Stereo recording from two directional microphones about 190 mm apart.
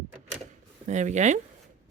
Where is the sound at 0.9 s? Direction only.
40° right (ahead or behind).